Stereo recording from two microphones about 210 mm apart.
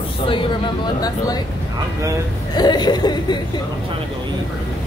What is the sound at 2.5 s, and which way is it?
Speech, 20° left (ahead or behind).